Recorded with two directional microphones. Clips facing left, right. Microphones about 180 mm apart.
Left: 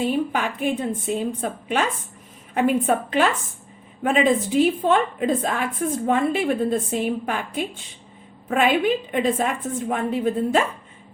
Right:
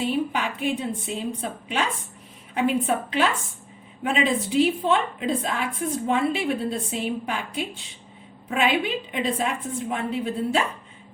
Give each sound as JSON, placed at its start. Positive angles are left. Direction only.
{"t": 0.0, "sound": "a woman's voice", "side_deg": 50}